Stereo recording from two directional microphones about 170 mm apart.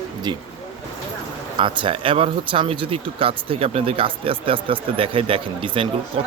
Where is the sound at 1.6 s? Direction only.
30° right (ahead or behind).